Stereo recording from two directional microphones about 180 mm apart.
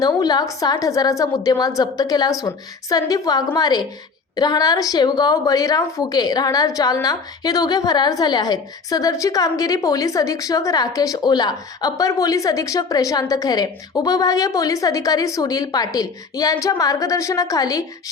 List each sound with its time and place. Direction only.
0.0 s a woman's voice: 20° left (ahead or behind)